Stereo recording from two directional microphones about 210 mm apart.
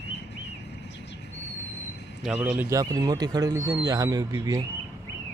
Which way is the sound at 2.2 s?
5° right (ahead or behind).